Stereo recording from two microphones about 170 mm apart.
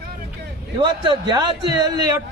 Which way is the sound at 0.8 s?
30° right (ahead or behind).